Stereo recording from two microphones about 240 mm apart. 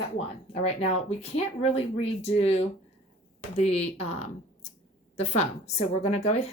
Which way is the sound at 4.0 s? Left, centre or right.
Left.